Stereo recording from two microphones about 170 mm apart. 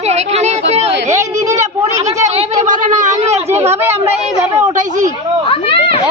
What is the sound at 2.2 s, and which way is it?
Speech, 40° right (ahead or behind).